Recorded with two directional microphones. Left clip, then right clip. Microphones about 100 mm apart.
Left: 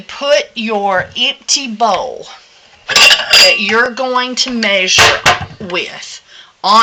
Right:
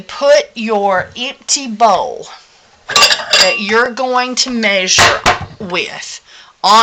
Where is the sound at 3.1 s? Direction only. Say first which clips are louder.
Left 4 dB; 5° left (ahead or behind).